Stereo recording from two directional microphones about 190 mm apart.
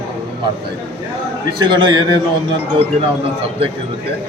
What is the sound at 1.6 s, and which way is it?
Speech, 25° right (ahead or behind).